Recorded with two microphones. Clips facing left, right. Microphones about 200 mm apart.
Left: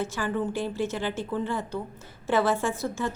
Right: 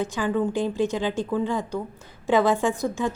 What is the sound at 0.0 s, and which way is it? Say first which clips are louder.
A woman's voice: right 4 dB; 15° right (ahead or behind).